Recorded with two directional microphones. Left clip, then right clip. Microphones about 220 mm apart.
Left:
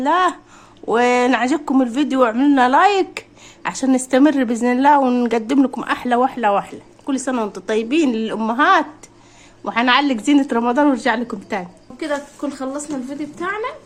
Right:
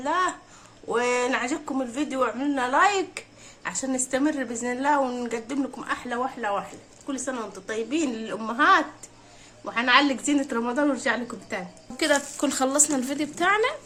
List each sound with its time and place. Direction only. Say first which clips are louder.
0.0 s speech: left 9 dB; 35° left (ahead or behind)
11.9 s speech: even; 40° right (ahead or behind)